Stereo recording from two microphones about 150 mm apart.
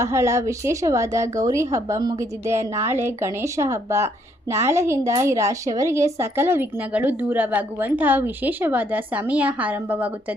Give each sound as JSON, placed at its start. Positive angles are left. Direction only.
{"t": 0.0, "sound": "speech", "side_deg": -20}